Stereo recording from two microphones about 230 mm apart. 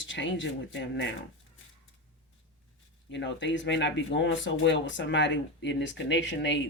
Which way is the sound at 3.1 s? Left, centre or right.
Left.